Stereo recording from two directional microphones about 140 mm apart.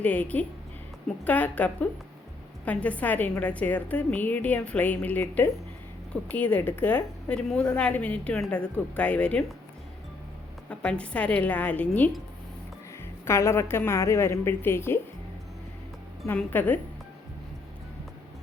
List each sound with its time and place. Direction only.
0.0 s a woman's voice: 10° left (ahead or behind)
10.7 s a woman's voice: 10° left (ahead or behind)
13.2 s a woman's voice: 20° left (ahead or behind)
16.2 s a woman's voice: 15° left (ahead or behind)